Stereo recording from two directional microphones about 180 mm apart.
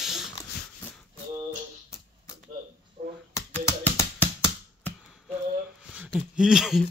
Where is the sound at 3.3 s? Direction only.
15° left (ahead or behind).